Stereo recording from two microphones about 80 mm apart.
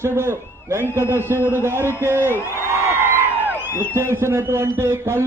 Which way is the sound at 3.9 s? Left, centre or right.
Right.